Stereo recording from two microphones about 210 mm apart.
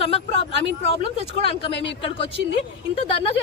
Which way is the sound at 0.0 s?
25° left (ahead or behind).